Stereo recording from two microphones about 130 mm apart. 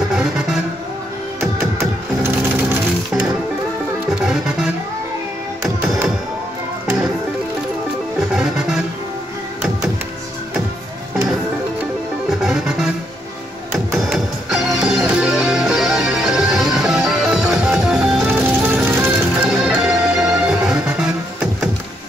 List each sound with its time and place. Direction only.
0.1 s music: 5° right (ahead or behind)
1.8 s music: 15° right (ahead or behind)
4.1 s music: 5° right (ahead or behind)
8.3 s music: 5° right (ahead or behind)
12.3 s music: centre (ahead or behind)
13.9 s music: centre (ahead or behind)
18.2 s music: 15° right (ahead or behind)